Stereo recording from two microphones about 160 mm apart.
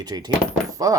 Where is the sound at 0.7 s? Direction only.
20° right (ahead or behind).